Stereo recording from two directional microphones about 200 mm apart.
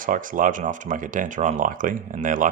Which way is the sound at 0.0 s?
40° right (ahead or behind).